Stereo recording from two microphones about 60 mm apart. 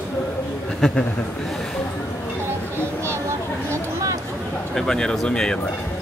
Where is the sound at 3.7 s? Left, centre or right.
Right.